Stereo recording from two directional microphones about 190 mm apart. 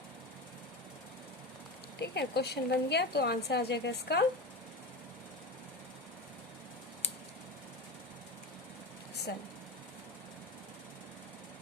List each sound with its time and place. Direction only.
2.0 s a woman's voice: 60° left (ahead or behind)
9.3 s a woman's voice: 60° left (ahead or behind)